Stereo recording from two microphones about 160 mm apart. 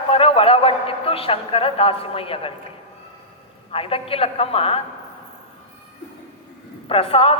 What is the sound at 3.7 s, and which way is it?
A man's voice, 35° left (ahead or behind).